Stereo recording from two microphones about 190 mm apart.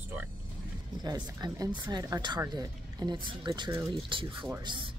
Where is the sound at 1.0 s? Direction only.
20° right (ahead or behind).